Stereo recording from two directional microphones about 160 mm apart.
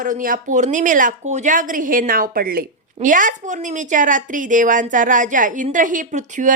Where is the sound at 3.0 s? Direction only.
55° right (ahead or behind).